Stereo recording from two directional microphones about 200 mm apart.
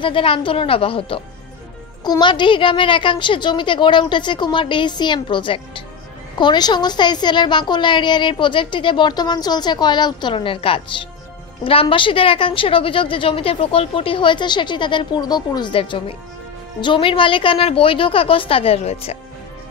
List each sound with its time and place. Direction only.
0.0 s a woman's voice: 25° left (ahead or behind)